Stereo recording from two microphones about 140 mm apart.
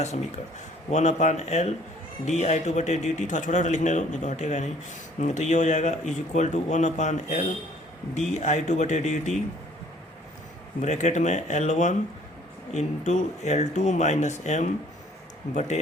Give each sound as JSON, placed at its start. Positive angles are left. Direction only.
{"t": 0.9, "sound": "a man's voice", "side_deg": 55}
{"t": 10.8, "sound": "a man's voice", "side_deg": 55}